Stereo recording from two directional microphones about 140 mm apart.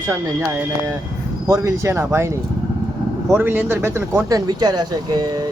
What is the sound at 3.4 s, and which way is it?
Speech, 15° right (ahead or behind).